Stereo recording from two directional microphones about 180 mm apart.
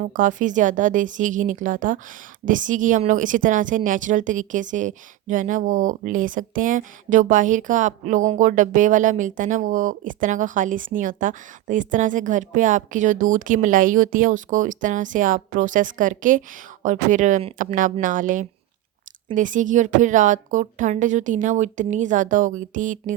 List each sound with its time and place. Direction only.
0.0 s speech: 45° right (ahead or behind)